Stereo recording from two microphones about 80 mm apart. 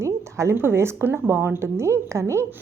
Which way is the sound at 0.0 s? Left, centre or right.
Right.